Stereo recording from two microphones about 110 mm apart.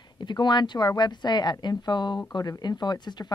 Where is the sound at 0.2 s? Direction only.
45° left (ahead or behind).